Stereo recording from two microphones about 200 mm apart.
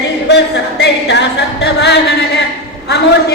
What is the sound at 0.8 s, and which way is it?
A capella, 60° left (ahead or behind).